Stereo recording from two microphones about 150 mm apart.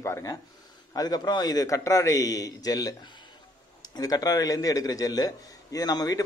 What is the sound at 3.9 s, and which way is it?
A man's voice, 25° left (ahead or behind).